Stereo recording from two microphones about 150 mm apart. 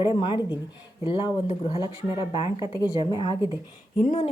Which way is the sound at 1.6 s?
35° left (ahead or behind).